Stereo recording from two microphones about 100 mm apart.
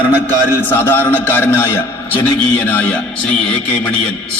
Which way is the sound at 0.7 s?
20° left (ahead or behind).